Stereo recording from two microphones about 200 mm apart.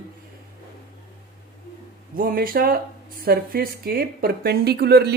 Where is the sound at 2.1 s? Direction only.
45° right (ahead or behind).